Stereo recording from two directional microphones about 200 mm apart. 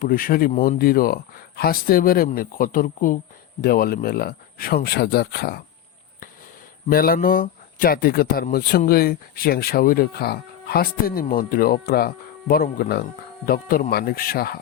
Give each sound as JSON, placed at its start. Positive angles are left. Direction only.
{"t": 0.0, "sound": "speech", "side_deg": 45}
{"t": 6.8, "sound": "speech", "side_deg": 50}